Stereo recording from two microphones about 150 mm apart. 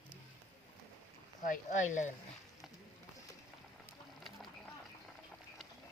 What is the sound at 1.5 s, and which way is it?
Speech, 55° left (ahead or behind).